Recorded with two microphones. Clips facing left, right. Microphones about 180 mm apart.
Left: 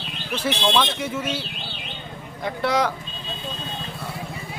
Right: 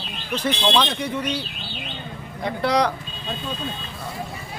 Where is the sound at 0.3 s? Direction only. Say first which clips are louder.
Right 1 dB; centre (ahead or behind).